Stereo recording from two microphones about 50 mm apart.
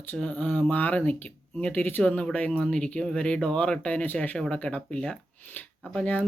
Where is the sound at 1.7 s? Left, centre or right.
Left.